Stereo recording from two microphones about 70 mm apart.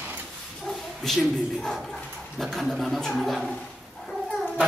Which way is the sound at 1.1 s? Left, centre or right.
Centre.